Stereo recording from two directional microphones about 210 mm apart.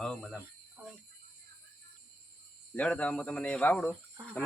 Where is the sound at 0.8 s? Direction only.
5° right (ahead or behind).